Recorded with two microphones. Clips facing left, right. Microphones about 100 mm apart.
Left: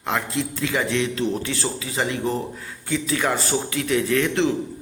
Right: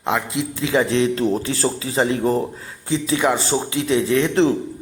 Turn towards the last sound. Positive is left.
turn(degrees=-30)  # may be behind; listen again after turning